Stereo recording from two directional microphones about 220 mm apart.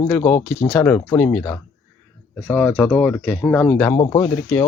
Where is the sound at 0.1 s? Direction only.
10° left (ahead or behind).